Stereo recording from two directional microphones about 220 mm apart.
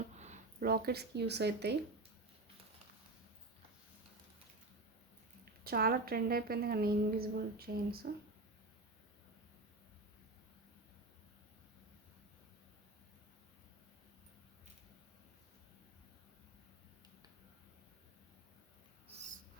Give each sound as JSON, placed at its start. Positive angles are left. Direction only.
{"t": 0.2, "sound": "speech", "side_deg": -35}
{"t": 5.6, "sound": "a woman's voice", "side_deg": -45}
{"t": 19.0, "sound": "owl", "side_deg": -30}